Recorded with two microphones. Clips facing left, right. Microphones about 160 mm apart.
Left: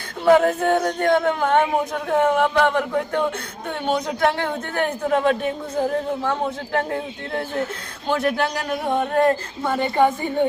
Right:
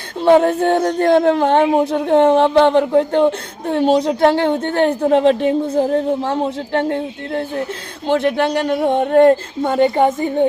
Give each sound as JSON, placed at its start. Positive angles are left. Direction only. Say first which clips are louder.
{"t": 0.3, "sound": "speech", "louder": "right 4 dB", "side_deg": -30}
{"t": 6.7, "sound": "speech", "louder": "right 6 dB", "side_deg": -30}